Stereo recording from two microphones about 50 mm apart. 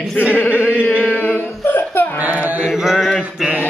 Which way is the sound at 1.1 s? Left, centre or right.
Left.